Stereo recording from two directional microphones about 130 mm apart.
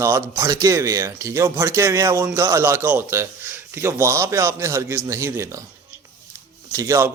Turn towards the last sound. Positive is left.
turn(degrees=-25)  # may be behind; listen again after turning